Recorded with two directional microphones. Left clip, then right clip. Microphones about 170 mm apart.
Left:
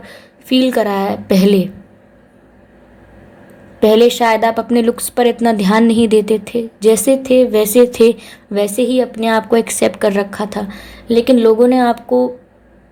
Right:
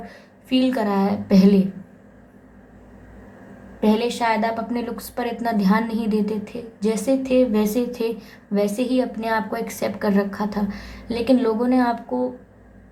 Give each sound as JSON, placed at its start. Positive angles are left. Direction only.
{"t": 0.0, "sound": "a woman's voice", "side_deg": 45}
{"t": 3.8, "sound": "a woman's voice", "side_deg": 50}